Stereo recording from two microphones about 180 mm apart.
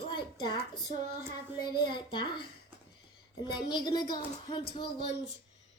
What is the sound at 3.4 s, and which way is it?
A child's voice, 25° left (ahead or behind).